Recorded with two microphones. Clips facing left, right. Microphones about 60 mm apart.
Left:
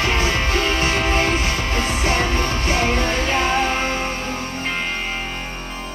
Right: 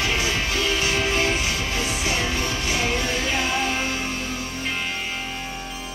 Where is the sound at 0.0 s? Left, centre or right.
Left.